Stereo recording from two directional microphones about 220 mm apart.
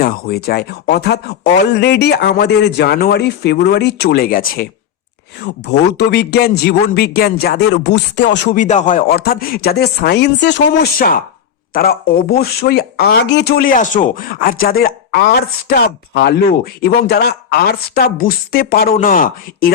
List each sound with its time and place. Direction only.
0.0 s speech: 45° left (ahead or behind)
5.4 s speech: 50° left (ahead or behind)
8.5 s speech: 35° left (ahead or behind)